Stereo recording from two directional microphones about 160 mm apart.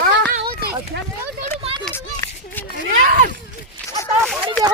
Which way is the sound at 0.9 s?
90° right.